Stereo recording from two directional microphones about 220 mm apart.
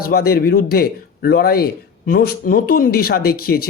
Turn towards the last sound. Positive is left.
turn(degrees=45)  # may be behind; listen again after turning